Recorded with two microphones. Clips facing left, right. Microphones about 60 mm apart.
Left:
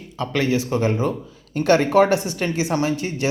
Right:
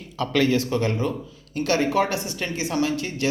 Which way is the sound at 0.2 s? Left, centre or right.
Left.